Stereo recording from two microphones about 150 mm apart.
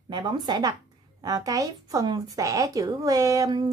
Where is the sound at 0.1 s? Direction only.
30° right (ahead or behind).